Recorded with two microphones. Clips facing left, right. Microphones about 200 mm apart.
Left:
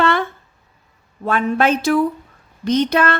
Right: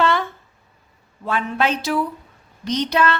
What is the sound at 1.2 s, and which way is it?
A woman's voice, 50° left (ahead or behind).